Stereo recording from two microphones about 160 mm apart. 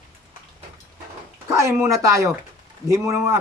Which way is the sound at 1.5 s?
20° right (ahead or behind).